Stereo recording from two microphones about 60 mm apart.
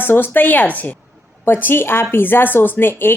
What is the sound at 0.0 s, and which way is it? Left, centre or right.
Speech, left.